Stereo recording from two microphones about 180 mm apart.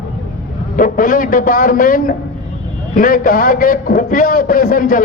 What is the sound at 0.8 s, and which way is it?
A man's voice, 50° left (ahead or behind).